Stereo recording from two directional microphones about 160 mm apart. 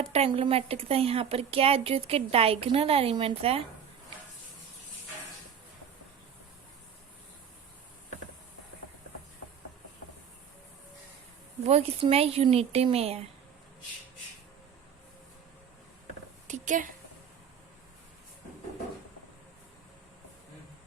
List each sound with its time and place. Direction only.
0.1 s a woman's voice: 40° right (ahead or behind)
11.6 s a woman's voice: 40° right (ahead or behind)
16.5 s a woman's voice: 50° right (ahead or behind)